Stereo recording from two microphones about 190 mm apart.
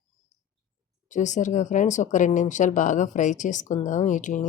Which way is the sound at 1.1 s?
40° left (ahead or behind).